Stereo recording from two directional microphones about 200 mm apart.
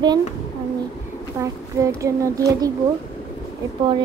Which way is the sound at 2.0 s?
15° right (ahead or behind).